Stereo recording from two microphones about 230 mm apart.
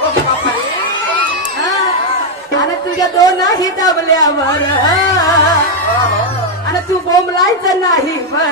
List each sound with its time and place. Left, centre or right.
1.1 s crowd: centre
3.0 s a sound: centre
4.8 s music: centre
7.1 s a woman's voice: centre